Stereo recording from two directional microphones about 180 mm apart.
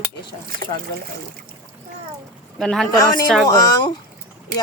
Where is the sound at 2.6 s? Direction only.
Centre (ahead or behind).